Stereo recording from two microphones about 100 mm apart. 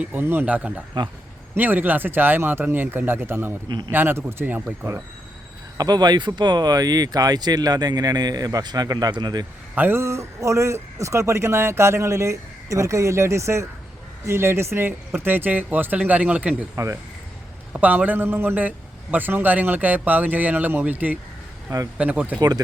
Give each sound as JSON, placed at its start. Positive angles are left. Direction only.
{"t": 0.0, "sound": "speech", "side_deg": -20}
{"t": 0.9, "sound": "a man's voice", "side_deg": -50}
{"t": 1.5, "sound": "a man's voice", "side_deg": -20}
{"t": 3.7, "sound": "a man's voice", "side_deg": -45}
{"t": 3.9, "sound": "a man's voice", "side_deg": -20}
{"t": 5.7, "sound": "speech", "side_deg": -40}
{"t": 9.7, "sound": "a man's voice", "side_deg": -25}
{"t": 16.7, "sound": "a man's voice", "side_deg": -30}
{"t": 17.7, "sound": "speech", "side_deg": -15}
{"t": 22.4, "sound": "speech", "side_deg": -40}